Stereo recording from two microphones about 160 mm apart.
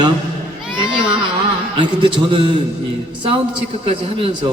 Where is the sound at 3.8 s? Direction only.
35° right (ahead or behind).